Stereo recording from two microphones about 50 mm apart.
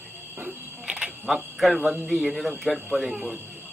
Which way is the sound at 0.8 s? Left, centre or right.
Centre.